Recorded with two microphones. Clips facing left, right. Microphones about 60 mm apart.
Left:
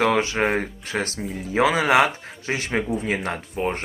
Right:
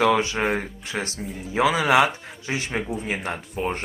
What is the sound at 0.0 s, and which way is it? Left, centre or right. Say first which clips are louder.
Speech: even; left.